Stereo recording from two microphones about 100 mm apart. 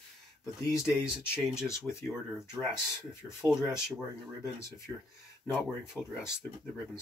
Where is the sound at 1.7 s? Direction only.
30° left (ahead or behind).